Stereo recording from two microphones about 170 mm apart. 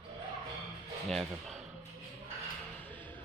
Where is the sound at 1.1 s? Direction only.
Centre (ahead or behind).